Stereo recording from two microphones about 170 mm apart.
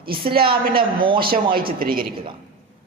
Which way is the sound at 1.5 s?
60° right (ahead or behind).